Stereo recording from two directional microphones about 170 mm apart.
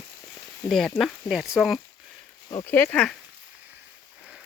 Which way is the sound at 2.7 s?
10° left (ahead or behind).